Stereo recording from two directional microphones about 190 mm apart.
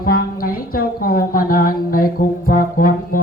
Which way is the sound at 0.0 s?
50° left (ahead or behind).